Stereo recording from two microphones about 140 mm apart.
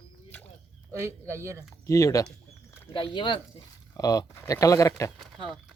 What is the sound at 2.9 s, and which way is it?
Speech, 35° left (ahead or behind).